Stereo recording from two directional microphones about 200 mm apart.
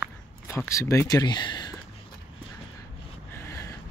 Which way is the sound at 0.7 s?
15° left (ahead or behind).